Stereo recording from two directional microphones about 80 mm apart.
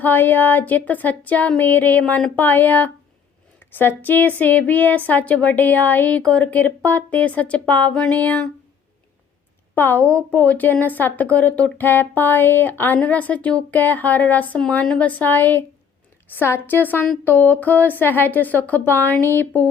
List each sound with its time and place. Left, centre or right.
0.0 s a woman's voice: left
9.7 s a woman's voice: left